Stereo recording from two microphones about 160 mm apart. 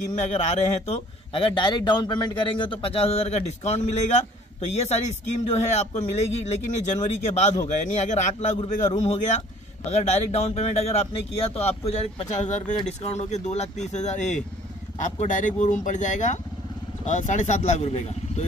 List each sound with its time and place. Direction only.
0.1 s a man's voice: 45° left (ahead or behind)